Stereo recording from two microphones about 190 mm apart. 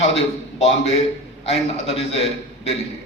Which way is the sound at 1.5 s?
30° left (ahead or behind).